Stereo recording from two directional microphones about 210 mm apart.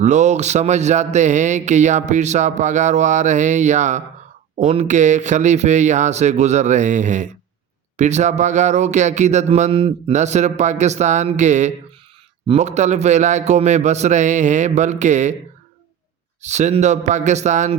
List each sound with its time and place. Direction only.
0.0 s a man's voice: 35° right (ahead or behind)
16.4 s a man's voice: 35° right (ahead or behind)